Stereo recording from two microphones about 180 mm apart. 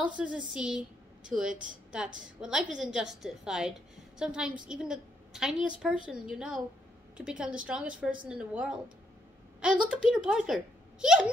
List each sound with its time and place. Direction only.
0.0 s a woman's voice: 5° right (ahead or behind)
10.0 s speech: 5° right (ahead or behind)